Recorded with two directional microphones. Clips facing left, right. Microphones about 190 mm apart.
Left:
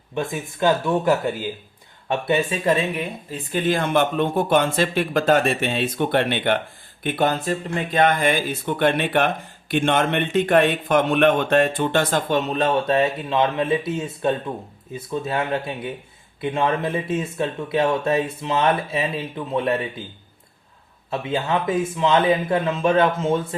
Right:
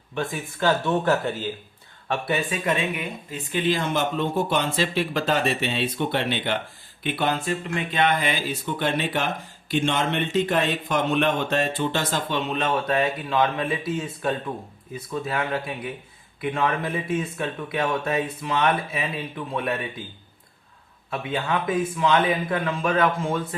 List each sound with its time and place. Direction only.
0.1 s speech: 20° left (ahead or behind)
2.0 s speech: 25° left (ahead or behind); by 6.6 s 55° left (ahead or behind)
7.0 s speech: 45° left (ahead or behind); by 19.7 s 25° left (ahead or behind)
21.1 s speech: 25° left (ahead or behind)